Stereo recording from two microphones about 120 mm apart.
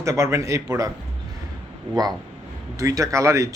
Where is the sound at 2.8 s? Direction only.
25° right (ahead or behind).